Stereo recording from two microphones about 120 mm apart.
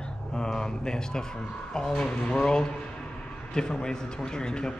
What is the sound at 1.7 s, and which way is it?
A man's voice, 5° left (ahead or behind).